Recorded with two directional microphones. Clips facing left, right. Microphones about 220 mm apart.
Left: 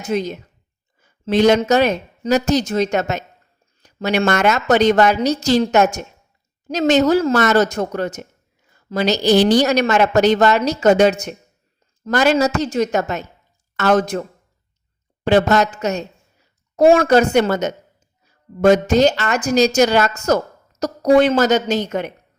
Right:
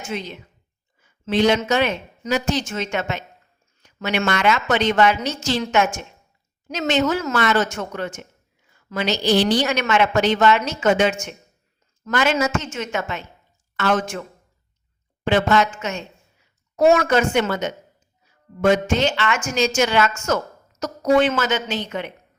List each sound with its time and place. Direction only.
0.0 s a woman's voice: 40° left (ahead or behind)
15.3 s a woman's voice: 40° left (ahead or behind)